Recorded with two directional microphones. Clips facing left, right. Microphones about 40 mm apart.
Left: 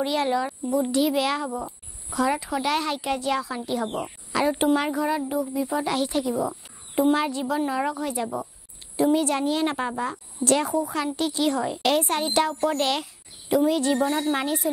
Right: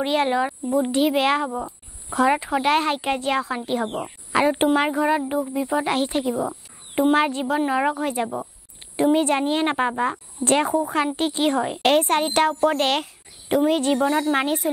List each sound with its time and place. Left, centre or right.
0.0 s a woman's voice: right